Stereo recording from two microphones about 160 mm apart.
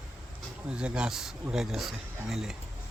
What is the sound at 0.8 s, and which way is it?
Speech, 5° right (ahead or behind).